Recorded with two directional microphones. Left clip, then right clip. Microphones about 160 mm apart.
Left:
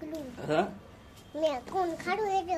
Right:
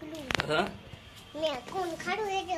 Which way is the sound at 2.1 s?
15° left (ahead or behind).